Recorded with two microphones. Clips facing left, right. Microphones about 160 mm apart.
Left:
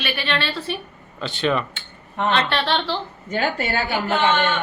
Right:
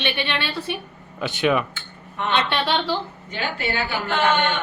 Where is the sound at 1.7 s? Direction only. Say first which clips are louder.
Left 3 dB; 30° left (ahead or behind).